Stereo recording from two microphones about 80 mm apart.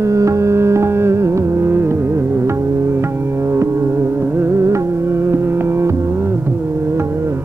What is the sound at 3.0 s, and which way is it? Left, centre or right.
Music, right.